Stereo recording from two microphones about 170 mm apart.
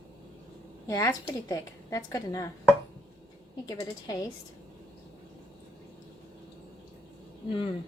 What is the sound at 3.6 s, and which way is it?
Speech, 25° left (ahead or behind).